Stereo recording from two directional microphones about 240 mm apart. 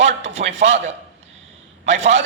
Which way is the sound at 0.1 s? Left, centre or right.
Right.